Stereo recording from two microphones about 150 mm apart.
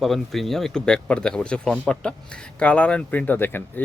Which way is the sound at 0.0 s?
Centre (ahead or behind).